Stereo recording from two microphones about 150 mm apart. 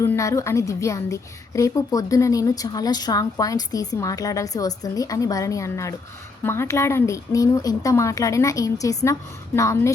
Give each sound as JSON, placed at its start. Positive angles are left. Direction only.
{"t": 0.0, "sound": "a woman's voice", "side_deg": 20}